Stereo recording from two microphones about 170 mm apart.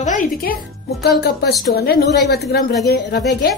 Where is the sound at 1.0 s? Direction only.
75° left (ahead or behind).